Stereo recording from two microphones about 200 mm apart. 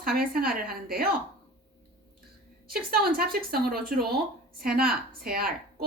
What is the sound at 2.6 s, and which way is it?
A woman's voice, 50° right (ahead or behind).